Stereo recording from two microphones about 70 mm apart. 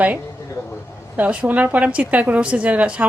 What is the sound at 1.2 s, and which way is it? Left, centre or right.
A woman's voice, right.